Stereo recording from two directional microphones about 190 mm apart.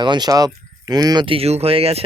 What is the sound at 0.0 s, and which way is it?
Speech, 20° right (ahead or behind).